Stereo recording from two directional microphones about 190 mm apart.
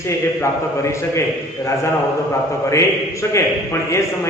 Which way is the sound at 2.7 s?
15° left (ahead or behind).